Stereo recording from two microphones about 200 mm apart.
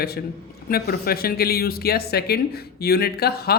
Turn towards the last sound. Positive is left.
turn(degrees=50)  # may be behind; listen again after turning